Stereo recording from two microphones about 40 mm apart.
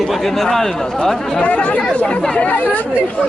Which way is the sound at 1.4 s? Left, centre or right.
Left.